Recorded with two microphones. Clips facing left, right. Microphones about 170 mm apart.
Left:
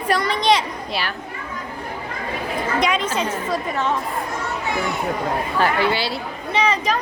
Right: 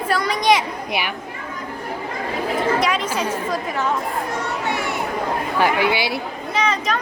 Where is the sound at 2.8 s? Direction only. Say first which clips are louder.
Even; 10° right (ahead or behind).